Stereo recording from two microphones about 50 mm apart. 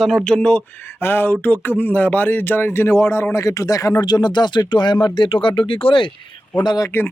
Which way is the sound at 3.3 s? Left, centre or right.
Left.